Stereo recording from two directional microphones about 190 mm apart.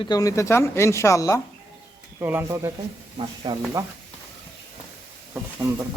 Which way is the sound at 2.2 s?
10° right (ahead or behind).